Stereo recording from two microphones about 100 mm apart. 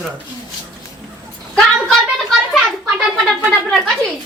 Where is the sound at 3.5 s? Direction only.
Centre (ahead or behind).